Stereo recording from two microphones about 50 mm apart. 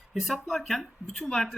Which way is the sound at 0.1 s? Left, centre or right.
Centre.